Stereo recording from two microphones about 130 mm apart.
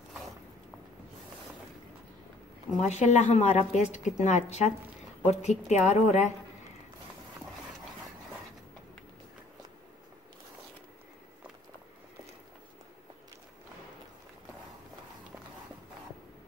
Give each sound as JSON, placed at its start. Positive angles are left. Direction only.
{"t": 2.8, "sound": "a woman's voice", "side_deg": 60}